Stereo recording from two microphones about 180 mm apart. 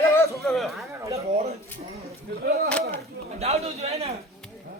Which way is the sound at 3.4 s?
35° right (ahead or behind).